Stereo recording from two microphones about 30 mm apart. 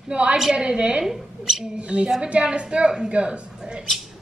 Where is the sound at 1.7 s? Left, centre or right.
Right.